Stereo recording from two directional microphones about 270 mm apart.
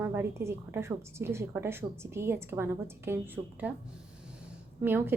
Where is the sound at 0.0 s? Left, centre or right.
Centre.